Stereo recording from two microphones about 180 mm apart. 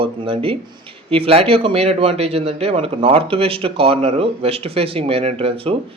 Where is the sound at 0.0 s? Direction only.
30° right (ahead or behind).